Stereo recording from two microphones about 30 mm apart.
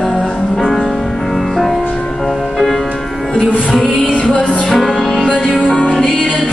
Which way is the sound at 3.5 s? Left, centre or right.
Left.